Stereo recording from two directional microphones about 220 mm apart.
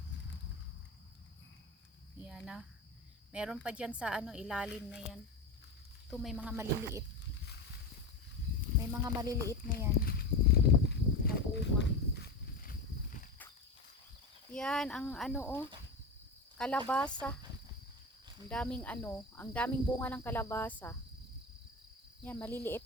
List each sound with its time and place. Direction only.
2.2 s a woman's voice: 5° right (ahead or behind)
8.9 s speech: 15° right (ahead or behind)
10.0 s a sound: 45° left (ahead or behind)
14.5 s a woman's voice: 5° left (ahead or behind)
18.4 s speech: 5° left (ahead or behind)
22.2 s speech: 10° left (ahead or behind)